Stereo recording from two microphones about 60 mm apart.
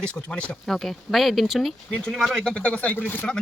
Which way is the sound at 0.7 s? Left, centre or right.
Centre.